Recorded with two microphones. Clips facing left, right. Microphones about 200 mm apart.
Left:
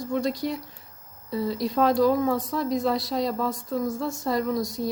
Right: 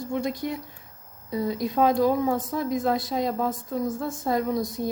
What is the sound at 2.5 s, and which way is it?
Speech, 50° right (ahead or behind).